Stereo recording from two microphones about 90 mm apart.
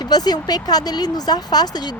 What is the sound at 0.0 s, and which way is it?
Speech, 50° left (ahead or behind).